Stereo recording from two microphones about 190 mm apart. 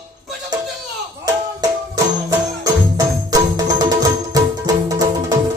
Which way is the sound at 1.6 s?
15° right (ahead or behind).